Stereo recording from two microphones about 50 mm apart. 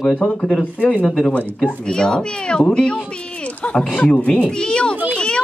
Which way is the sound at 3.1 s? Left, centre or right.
Left.